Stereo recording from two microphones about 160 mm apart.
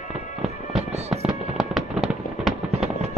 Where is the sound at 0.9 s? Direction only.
45° right (ahead or behind).